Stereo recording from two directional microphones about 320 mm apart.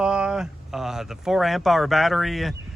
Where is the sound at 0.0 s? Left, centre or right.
Centre.